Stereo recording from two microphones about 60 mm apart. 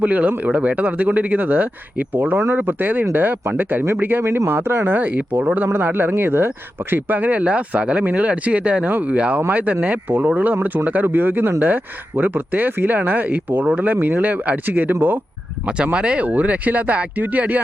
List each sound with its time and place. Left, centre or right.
0.0 s speech: right
4.2 s speech: right
15.6 s speech: centre